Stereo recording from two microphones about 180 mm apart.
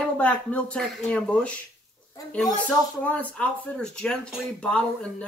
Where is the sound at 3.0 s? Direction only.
5° left (ahead or behind).